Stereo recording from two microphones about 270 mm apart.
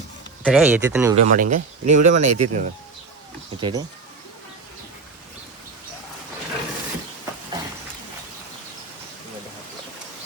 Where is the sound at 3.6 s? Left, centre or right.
Centre.